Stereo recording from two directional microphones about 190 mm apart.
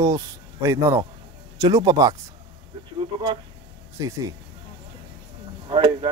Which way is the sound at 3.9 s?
15° right (ahead or behind).